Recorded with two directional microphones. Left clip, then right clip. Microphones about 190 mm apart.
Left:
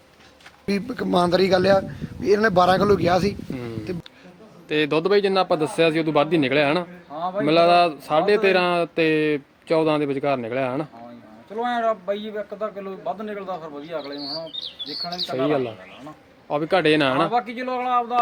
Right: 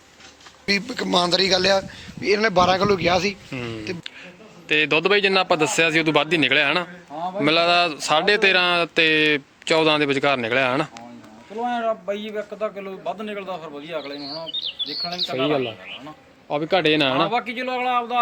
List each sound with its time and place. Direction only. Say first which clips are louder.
0.6 s a man's voice: right 4 dB; 40° left (ahead or behind)
3.5 s a man's voice: right 1 dB; centre (ahead or behind)
14.0 s speech: left 1 dB; 10° right (ahead or behind)
15.3 s a man's voice: left 1 dB; centre (ahead or behind)